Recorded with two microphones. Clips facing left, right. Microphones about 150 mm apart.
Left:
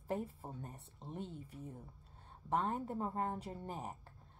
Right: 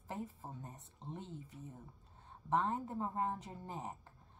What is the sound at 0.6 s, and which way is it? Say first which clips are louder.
Speech: even; 20° right (ahead or behind).